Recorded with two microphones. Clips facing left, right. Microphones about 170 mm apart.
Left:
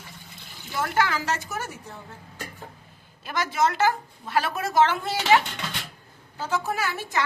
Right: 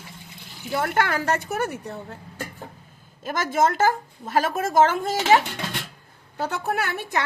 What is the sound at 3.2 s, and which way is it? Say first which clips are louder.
A woman's voice: right 3 dB; 45° right (ahead or behind).